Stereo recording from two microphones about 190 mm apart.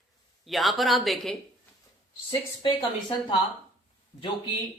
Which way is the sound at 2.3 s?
25° left (ahead or behind).